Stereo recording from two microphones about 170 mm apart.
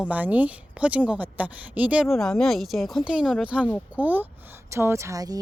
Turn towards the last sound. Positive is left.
turn(degrees=-20)  # may be behind; listen again after turning